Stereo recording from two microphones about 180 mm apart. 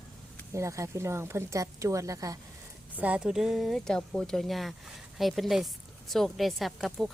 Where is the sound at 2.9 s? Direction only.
5° right (ahead or behind).